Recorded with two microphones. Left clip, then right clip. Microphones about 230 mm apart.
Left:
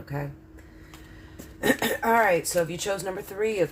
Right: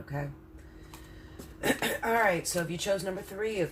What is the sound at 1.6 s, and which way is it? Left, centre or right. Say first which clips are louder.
Speech: left 5 dB; left.